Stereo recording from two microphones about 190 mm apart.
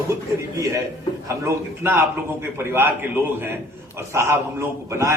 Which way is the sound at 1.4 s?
10° right (ahead or behind).